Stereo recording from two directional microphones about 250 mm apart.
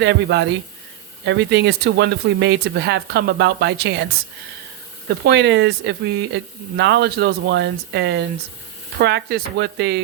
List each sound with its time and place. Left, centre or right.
0.0 s speech: right
5.0 s speech: right